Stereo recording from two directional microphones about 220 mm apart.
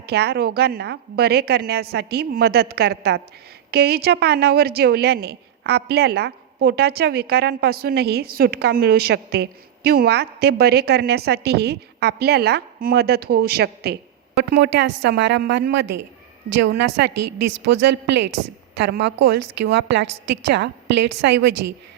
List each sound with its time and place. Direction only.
0.0 s a woman's voice: 45° right (ahead or behind)